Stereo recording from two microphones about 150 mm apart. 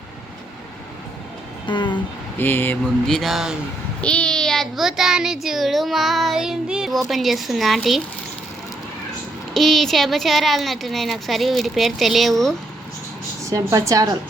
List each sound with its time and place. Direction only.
1.6 s vehicle: 30° left (ahead or behind)
2.4 s a sound: 15° left (ahead or behind)
2.8 s a child's voice: centre (ahead or behind)
9.6 s a child's voice: centre (ahead or behind)
13.4 s speech: 20° right (ahead or behind)